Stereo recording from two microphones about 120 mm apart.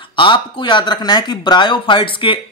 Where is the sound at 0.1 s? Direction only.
45° left (ahead or behind).